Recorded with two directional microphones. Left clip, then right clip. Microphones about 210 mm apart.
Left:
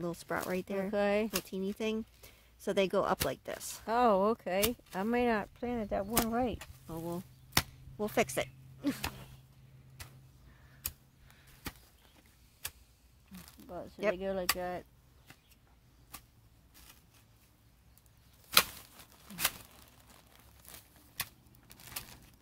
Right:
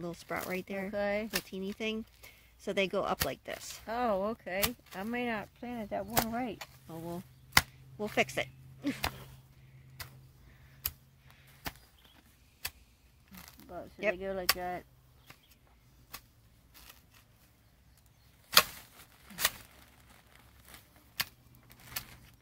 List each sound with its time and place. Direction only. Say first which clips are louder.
0.0 s speech: left 2 dB; 15° left (ahead or behind)
0.9 s speech: left 3 dB; 50° left (ahead or behind)
1.5 s speech: left 1 dB; 15° left (ahead or behind)
3.8 s speech: left 5 dB; 50° left (ahead or behind)
6.9 s speech: left 3 dB; 15° left (ahead or behind)
7.5 s chop: right 6 dB; 25° right (ahead or behind)
8.0 s speech: even; 15° left (ahead or behind)
10.0 s a sound: right 5 dB; 30° right (ahead or behind)
13.7 s speech: even; 30° left (ahead or behind)
19.3 s a sound: right 1 dB; 40° left (ahead or behind)